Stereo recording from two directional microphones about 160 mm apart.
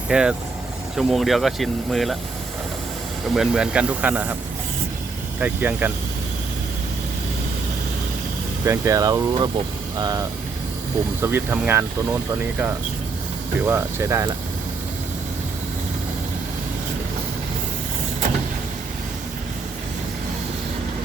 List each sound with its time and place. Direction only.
0.1 s speech: 5° right (ahead or behind)
3.2 s speech: centre (ahead or behind)
5.4 s speech: 10° right (ahead or behind)
8.6 s speech: 15° right (ahead or behind)
13.7 s speech: 15° right (ahead or behind)